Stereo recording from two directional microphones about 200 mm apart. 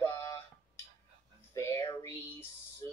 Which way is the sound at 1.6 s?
15° left (ahead or behind).